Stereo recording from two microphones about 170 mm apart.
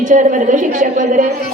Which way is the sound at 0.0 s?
45° right (ahead or behind).